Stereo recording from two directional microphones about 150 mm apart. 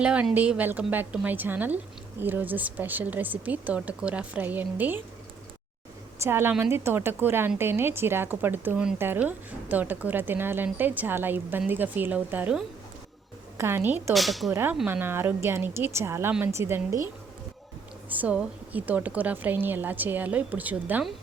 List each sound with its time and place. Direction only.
0.0 s a woman's voice: 5° right (ahead or behind)
6.2 s a woman's voice: 15° right (ahead or behind)
14.1 s speech: centre (ahead or behind)
14.5 s a woman's voice: 15° right (ahead or behind)
18.1 s a woman's voice: 10° right (ahead or behind)